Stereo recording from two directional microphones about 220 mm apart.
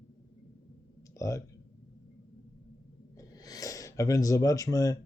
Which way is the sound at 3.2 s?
15° left (ahead or behind).